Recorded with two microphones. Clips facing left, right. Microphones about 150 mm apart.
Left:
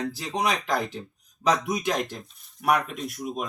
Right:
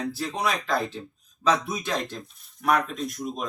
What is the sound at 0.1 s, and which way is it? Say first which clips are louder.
Speech: left 1 dB; 15° left (ahead or behind).